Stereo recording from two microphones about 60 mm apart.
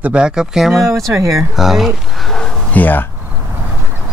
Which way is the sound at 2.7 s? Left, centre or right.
Left.